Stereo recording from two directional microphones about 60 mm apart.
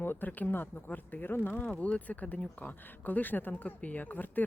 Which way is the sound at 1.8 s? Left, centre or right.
Left.